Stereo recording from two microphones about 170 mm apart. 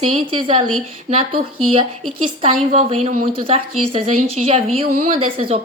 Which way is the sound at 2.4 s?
35° right (ahead or behind).